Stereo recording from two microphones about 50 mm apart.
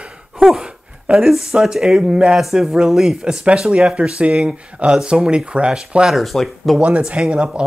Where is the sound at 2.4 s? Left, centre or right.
Centre.